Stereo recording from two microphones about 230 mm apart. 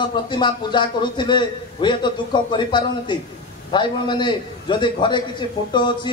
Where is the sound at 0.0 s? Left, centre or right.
Centre.